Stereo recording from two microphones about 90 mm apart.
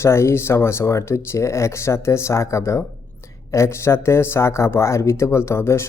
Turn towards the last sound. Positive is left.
turn(degrees=30)  # may be behind; listen again after turning